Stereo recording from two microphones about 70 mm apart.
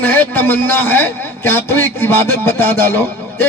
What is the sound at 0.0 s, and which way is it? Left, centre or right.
A man's voice, left.